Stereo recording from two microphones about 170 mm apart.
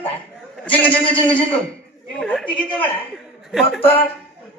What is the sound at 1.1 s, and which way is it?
Speech, 30° left (ahead or behind).